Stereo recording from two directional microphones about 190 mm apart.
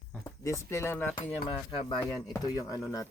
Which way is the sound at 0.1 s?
15° left (ahead or behind).